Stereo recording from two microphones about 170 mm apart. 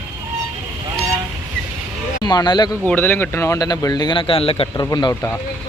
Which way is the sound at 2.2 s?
25° left (ahead or behind).